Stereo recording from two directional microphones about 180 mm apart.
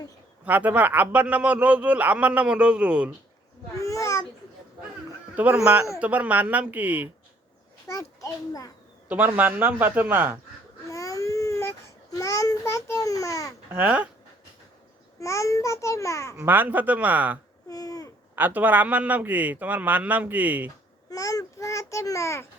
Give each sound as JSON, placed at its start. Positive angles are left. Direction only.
{"t": 0.4, "sound": "a man's voice", "side_deg": -10}
{"t": 3.8, "sound": "babbling", "side_deg": 15}
{"t": 5.3, "sound": "a man's voice", "side_deg": -10}
{"t": 7.9, "sound": "a child's voice", "side_deg": 15}
{"t": 9.0, "sound": "a man's voice", "side_deg": -10}
{"t": 10.8, "sound": "baby cry", "side_deg": 15}
{"t": 12.1, "sound": "a child's voice", "side_deg": 20}
{"t": 13.7, "sound": "a man's voice", "side_deg": -10}
{"t": 15.2, "sound": "a child's voice", "side_deg": 15}
{"t": 16.4, "sound": "a man's voice", "side_deg": -10}
{"t": 17.7, "sound": "babbling", "side_deg": 20}
{"t": 18.3, "sound": "a man's voice", "side_deg": -10}
{"t": 21.1, "sound": "babbling", "side_deg": 20}